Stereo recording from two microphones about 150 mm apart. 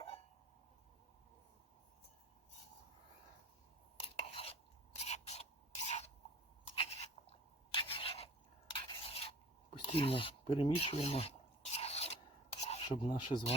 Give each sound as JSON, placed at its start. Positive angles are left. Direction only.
{"t": 3.9, "sound": "stir", "side_deg": 40}
{"t": 4.9, "sound": "rub", "side_deg": 45}
{"t": 6.7, "sound": "crunch", "side_deg": 45}
{"t": 7.7, "sound": "filing", "side_deg": 35}
{"t": 8.7, "sound": "scrape", "side_deg": 40}
{"t": 9.8, "sound": "a sound", "side_deg": 35}
{"t": 12.5, "sound": "filing", "side_deg": 45}
{"t": 13.1, "sound": "speech", "side_deg": 30}